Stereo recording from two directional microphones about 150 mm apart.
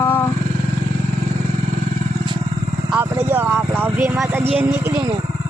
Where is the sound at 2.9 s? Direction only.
15° right (ahead or behind).